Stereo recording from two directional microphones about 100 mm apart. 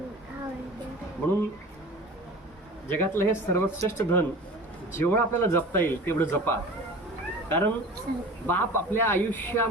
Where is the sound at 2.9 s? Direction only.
25° left (ahead or behind).